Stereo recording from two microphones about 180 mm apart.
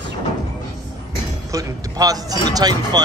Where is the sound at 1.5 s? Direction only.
20° right (ahead or behind).